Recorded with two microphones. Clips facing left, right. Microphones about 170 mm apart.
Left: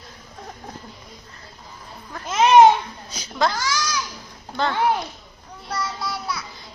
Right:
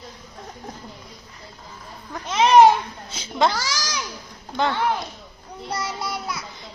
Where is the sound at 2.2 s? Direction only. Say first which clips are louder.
Left 1 dB; centre (ahead or behind).